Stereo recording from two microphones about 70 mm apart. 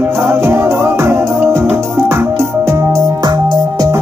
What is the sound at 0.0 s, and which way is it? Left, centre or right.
Music, right.